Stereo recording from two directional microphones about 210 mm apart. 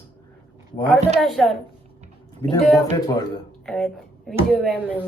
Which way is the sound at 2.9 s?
15° left (ahead or behind).